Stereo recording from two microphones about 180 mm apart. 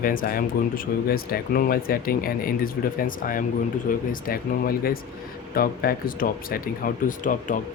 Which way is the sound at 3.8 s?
50° left (ahead or behind).